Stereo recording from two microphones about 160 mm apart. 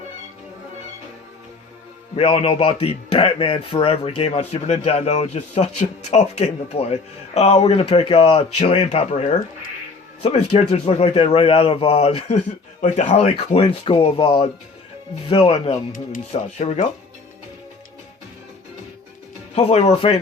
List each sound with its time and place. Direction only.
2.1 s a man's voice: 35° left (ahead or behind)
19.5 s a man's voice: 40° left (ahead or behind)